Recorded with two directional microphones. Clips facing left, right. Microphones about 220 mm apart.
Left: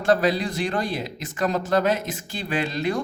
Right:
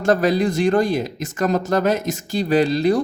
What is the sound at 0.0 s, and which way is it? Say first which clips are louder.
A man's voice: right 4 dB; 45° right (ahead or behind).